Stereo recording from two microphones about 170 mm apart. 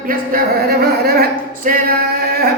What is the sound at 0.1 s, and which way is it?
Speech, 60° right (ahead or behind).